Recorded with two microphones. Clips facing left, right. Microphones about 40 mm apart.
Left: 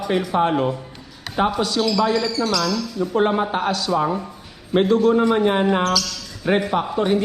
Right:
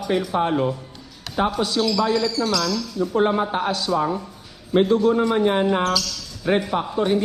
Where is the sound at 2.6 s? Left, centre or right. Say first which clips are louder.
Left 1 dB; centre.